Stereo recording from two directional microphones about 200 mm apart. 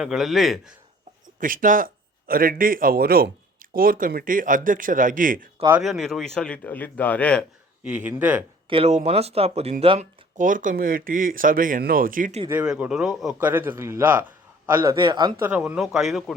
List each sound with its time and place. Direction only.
0.0 s speech: centre (ahead or behind)
1.4 s a man's voice: 40° right (ahead or behind)
5.7 s speech: centre (ahead or behind)
7.9 s a man's voice: 5° right (ahead or behind)
8.7 s speech: 30° right (ahead or behind)
10.3 s a man's voice: 40° right (ahead or behind)
12.5 s a man's voice: 5° right (ahead or behind); by 15.3 s 20° right (ahead or behind)
15.4 s speech: 10° right (ahead or behind)